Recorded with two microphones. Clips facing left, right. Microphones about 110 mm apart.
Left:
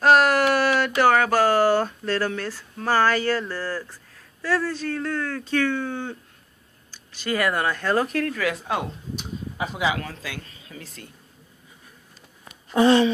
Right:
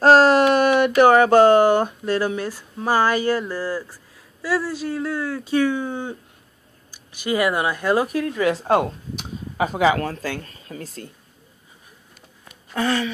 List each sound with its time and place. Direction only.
0.0 s speech: 30° right (ahead or behind); by 8.4 s 15° right (ahead or behind)
8.4 s speech: 30° right (ahead or behind)
9.7 s speech: 45° right (ahead or behind)
12.7 s speech: 25° left (ahead or behind)